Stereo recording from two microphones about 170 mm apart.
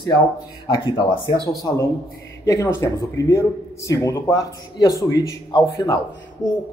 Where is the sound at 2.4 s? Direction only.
20° left (ahead or behind).